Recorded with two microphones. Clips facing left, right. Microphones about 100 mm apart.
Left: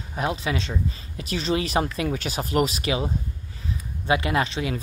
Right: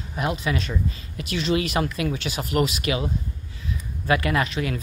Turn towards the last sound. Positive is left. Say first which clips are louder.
# even
turn(degrees=30)  # may be behind; listen again after turning